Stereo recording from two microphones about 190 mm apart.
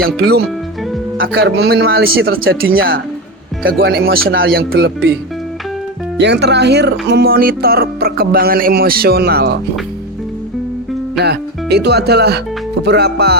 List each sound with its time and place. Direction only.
0.0 s speech: 55° right (ahead or behind)
6.1 s speech: 65° right (ahead or behind)
11.2 s speech: 60° right (ahead or behind)